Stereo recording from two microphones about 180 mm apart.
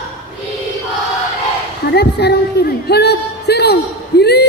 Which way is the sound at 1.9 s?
65° left (ahead or behind).